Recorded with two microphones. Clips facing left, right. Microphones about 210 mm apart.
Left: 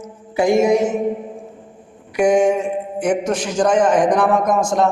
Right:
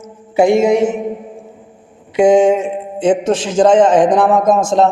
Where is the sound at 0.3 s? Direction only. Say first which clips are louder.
Right 4 dB; 25° right (ahead or behind).